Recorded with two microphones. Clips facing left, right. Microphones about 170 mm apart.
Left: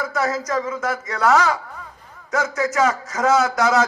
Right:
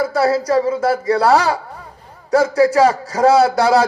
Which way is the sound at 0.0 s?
35° right (ahead or behind).